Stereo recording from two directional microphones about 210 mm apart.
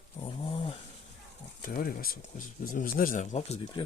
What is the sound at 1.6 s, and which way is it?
Speech, 40° left (ahead or behind).